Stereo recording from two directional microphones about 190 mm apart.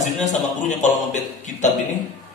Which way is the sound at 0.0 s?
40° left (ahead or behind).